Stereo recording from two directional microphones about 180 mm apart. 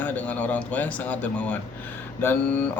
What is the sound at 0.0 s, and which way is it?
Speech, 10° left (ahead or behind).